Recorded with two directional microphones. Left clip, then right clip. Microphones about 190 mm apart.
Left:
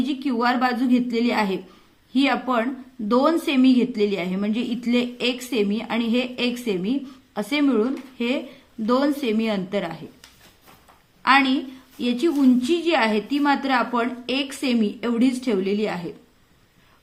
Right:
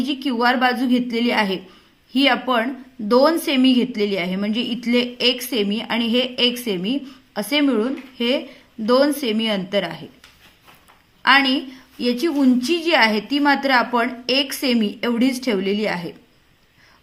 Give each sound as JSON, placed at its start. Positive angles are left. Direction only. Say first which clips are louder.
{"t": 0.1, "sound": "a woman's voice", "louder": "right 5 dB", "side_deg": -20}
{"t": 11.2, "sound": "a woman's voice", "louder": "right 3 dB", "side_deg": -20}